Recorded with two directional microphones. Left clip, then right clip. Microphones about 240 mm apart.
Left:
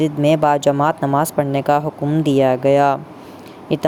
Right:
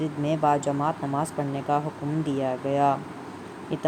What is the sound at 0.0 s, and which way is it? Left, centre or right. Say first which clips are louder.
Speech: left 10 dB; left.